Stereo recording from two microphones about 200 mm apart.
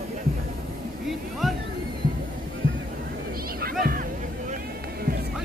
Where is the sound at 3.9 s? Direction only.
45° right (ahead or behind).